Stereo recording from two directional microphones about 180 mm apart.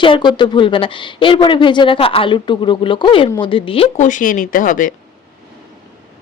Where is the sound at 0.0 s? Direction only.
25° left (ahead or behind); by 4.9 s 45° left (ahead or behind).